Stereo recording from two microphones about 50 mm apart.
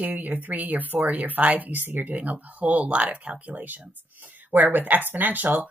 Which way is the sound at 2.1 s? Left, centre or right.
Right.